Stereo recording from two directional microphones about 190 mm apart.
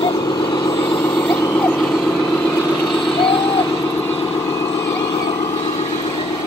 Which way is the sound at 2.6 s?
20° left (ahead or behind).